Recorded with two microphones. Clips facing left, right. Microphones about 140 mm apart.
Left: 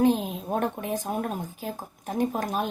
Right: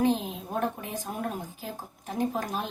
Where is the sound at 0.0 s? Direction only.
55° left (ahead or behind).